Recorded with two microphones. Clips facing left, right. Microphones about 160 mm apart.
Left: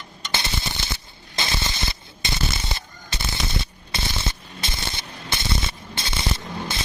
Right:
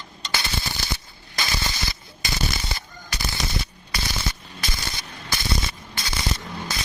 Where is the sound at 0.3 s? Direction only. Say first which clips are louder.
Left 1 dB; 25° left (ahead or behind).